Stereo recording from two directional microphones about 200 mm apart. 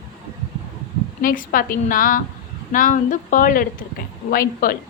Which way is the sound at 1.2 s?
45° left (ahead or behind).